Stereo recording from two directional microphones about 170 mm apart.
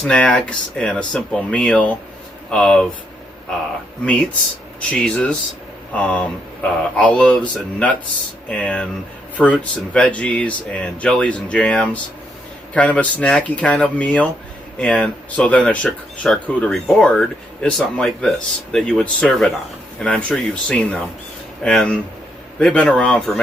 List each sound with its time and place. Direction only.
0.0 s speech: 5° left (ahead or behind)
4.0 s speech: 5° left (ahead or behind)
8.4 s speech: 5° left (ahead or behind)